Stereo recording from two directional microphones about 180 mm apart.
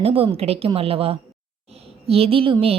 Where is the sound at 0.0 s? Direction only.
30° right (ahead or behind).